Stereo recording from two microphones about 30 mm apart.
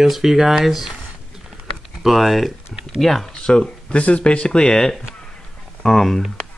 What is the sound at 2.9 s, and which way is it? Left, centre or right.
Speech, centre.